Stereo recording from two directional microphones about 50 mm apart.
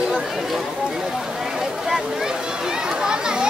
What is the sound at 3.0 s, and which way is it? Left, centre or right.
Chatter, centre.